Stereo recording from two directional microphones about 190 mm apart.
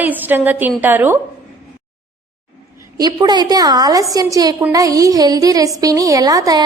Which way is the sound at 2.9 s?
20° right (ahead or behind).